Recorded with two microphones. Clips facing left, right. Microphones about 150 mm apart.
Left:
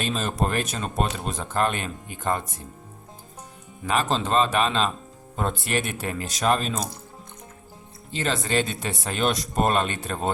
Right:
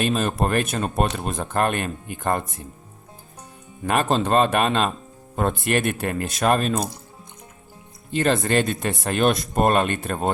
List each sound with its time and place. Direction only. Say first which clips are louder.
0.0 s speech: right 4 dB; 55° right (ahead or behind)
3.8 s speech: right 3 dB; 55° right (ahead or behind)
8.1 s speech: right 5 dB; 50° right (ahead or behind)